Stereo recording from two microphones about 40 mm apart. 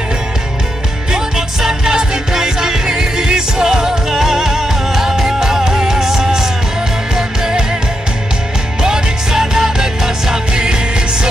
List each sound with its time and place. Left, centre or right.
1.1 s music: centre
8.8 s music: centre